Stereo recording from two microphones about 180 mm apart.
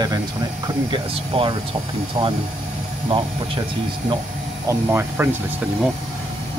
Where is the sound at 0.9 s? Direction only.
30° right (ahead or behind).